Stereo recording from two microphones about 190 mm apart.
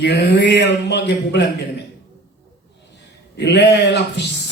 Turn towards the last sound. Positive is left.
turn(degrees=65)  # may be behind; listen again after turning